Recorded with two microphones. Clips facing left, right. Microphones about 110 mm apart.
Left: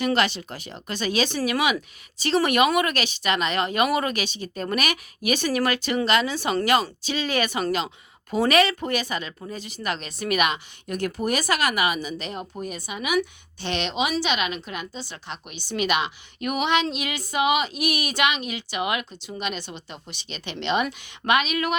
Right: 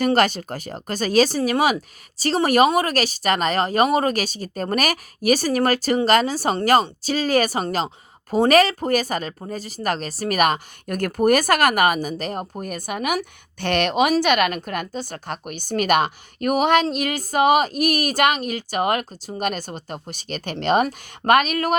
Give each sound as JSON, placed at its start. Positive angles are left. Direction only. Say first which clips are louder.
{"t": 0.0, "sound": "a woman's voice", "louder": "right 5 dB", "side_deg": -45}